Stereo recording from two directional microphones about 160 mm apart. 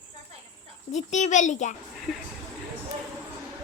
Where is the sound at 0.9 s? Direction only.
45° left (ahead or behind).